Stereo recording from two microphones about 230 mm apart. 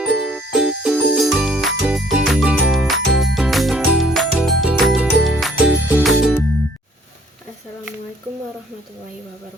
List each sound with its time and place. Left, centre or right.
0.0 s jingle bell: centre
3.3 s music: centre